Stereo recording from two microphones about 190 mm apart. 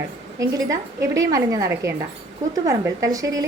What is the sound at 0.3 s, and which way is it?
A woman's voice, 15° right (ahead or behind).